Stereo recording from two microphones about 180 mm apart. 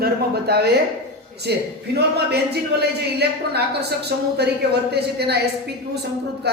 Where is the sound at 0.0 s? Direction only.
65° right (ahead or behind).